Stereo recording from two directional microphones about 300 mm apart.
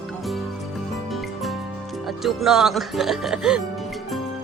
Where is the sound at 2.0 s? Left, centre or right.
Centre.